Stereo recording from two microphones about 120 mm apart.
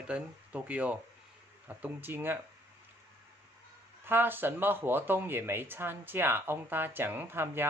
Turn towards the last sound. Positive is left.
turn(degrees=-20)  # may be behind; listen again after turning